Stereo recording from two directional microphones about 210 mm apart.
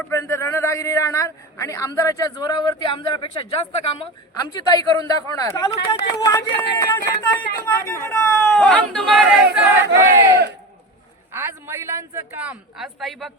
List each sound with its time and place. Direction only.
0.1 s a man's voice: 15° left (ahead or behind)
9.9 s a woman's voice: 15° right (ahead or behind)